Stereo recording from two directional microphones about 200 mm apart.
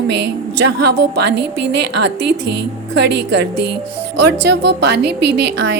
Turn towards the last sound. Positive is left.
turn(degrees=-60)  # may be behind; listen again after turning